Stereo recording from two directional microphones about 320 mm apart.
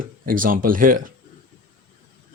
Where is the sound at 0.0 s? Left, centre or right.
Right.